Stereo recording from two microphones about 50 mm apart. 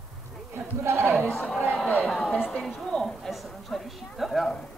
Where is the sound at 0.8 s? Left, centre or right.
Right.